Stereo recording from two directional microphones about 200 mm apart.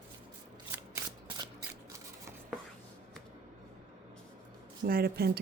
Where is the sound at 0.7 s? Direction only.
15° right (ahead or behind).